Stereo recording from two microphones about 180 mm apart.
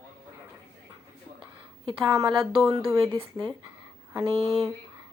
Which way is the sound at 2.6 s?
20° right (ahead or behind).